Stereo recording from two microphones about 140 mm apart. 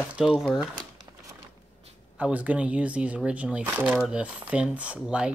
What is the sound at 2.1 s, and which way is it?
Speech, 10° right (ahead or behind).